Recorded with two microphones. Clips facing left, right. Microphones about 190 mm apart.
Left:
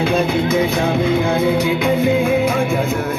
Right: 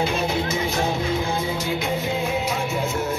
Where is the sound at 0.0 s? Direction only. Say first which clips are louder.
Left 7 dB; 55° left (ahead or behind).